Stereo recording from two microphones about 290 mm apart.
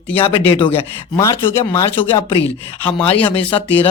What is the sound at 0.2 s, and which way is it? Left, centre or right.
Speech, centre.